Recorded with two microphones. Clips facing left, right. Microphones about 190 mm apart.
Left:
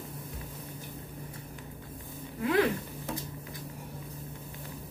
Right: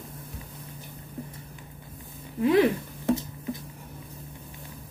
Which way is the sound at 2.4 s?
20° right (ahead or behind).